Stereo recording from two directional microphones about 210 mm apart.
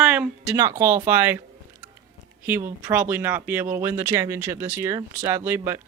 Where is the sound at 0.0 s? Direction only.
5° right (ahead or behind).